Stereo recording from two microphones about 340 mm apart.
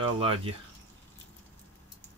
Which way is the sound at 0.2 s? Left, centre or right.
Centre.